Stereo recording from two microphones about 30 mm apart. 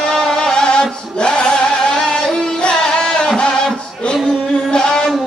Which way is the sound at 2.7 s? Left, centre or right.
Left.